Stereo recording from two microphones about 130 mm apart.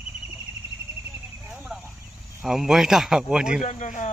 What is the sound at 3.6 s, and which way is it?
Speech, 75° left (ahead or behind).